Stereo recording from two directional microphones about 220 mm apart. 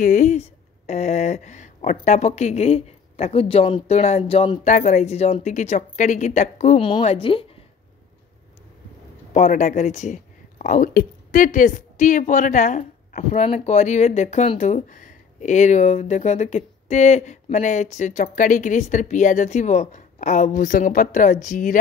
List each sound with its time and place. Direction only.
0.0 s speech: 35° left (ahead or behind)
9.3 s speech: 35° left (ahead or behind)